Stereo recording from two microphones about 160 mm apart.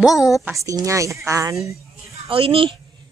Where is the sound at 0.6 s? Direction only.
20° right (ahead or behind).